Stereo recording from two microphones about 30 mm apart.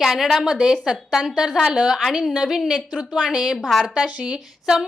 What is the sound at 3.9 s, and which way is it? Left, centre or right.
Speech, right.